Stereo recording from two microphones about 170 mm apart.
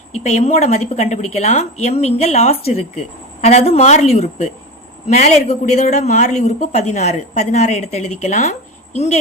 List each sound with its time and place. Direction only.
0.2 s a woman's voice: 40° left (ahead or behind)